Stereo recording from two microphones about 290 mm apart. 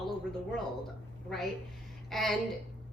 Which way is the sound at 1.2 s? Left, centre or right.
Centre.